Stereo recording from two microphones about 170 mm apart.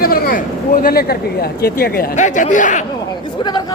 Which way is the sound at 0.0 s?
60° left (ahead or behind).